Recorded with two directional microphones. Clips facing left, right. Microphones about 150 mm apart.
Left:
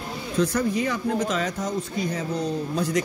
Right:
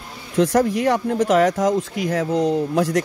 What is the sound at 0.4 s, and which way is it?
Speech, 80° right.